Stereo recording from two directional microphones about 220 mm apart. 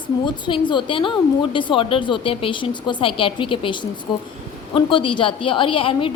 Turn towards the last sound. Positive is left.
turn(degrees=25)  # may be behind; listen again after turning